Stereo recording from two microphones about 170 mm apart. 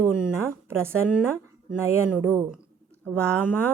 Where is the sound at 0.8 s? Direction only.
15° right (ahead or behind).